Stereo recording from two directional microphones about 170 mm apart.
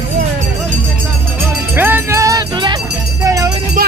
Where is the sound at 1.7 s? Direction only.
10° right (ahead or behind).